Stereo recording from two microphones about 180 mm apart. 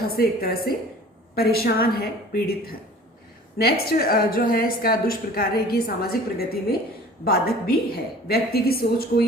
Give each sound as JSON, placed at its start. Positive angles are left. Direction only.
{"t": 0.2, "sound": "a woman's voice", "side_deg": 55}